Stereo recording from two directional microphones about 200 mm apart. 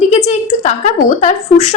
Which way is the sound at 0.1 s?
35° left (ahead or behind).